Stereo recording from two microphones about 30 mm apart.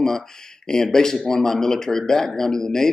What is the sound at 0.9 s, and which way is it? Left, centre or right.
A man's voice, centre.